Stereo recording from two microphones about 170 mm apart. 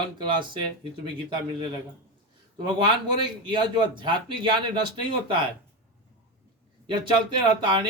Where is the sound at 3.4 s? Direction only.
25° right (ahead or behind).